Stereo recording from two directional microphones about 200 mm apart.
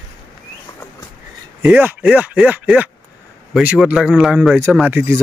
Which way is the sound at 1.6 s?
5° right (ahead or behind).